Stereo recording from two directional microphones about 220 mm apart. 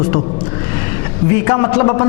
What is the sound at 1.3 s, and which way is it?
Speech, 15° left (ahead or behind).